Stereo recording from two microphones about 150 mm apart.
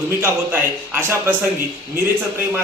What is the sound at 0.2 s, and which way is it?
A man's voice, 15° right (ahead or behind).